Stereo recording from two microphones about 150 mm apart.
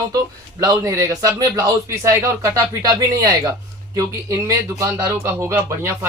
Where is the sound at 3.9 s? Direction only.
20° right (ahead or behind).